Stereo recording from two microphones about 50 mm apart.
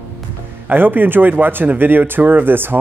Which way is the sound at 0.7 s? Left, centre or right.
Right.